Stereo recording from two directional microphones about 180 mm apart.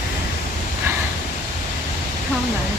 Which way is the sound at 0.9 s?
15° right (ahead or behind).